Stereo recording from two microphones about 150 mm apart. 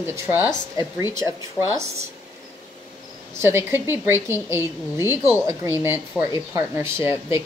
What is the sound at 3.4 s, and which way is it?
Speech, 15° right (ahead or behind).